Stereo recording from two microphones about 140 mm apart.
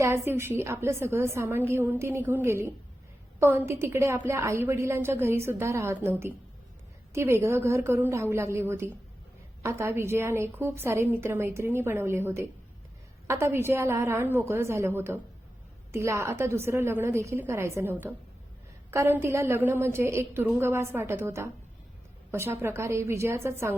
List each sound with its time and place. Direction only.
0.0 s a woman's voice: 15° right (ahead or behind)